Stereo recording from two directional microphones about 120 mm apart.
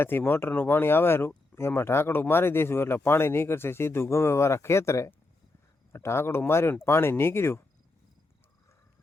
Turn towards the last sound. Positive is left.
turn(degrees=20)  # may be behind; listen again after turning